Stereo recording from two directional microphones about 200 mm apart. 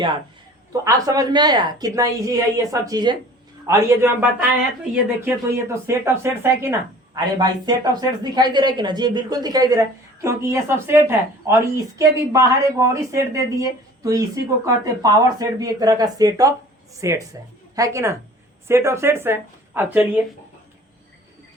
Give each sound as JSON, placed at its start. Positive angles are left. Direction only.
{"t": 0.7, "sound": "a woman's voice", "side_deg": -15}